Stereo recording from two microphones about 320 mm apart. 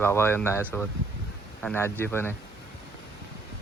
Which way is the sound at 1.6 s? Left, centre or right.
Centre.